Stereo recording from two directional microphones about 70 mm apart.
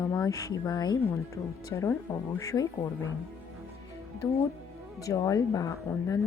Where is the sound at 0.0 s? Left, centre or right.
Left.